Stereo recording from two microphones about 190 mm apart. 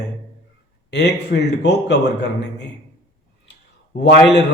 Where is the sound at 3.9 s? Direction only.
60° left (ahead or behind).